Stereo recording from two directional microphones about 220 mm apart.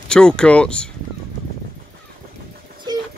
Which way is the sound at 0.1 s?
5° left (ahead or behind).